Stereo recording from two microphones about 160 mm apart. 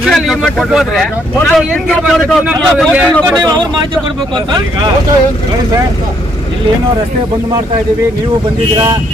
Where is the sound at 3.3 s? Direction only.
25° right (ahead or behind).